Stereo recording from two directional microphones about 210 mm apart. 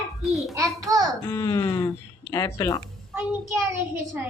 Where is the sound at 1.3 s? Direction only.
15° left (ahead or behind).